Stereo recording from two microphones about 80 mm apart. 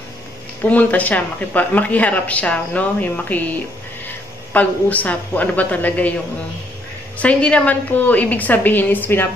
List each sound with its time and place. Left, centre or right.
0.7 s speech: centre
7.2 s speech: centre